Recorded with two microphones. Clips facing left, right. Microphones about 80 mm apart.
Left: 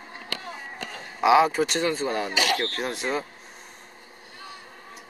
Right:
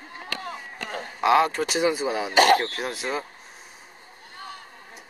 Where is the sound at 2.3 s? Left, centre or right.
Right.